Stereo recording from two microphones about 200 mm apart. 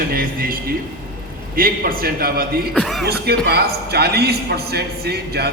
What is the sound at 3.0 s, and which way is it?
A man's voice, 50° right (ahead or behind).